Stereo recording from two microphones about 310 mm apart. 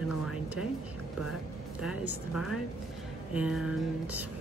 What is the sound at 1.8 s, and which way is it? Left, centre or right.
Speech, centre.